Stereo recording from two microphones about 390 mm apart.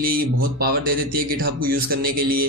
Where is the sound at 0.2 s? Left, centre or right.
Right.